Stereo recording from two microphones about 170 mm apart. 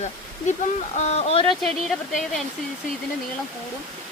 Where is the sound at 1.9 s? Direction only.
Centre (ahead or behind).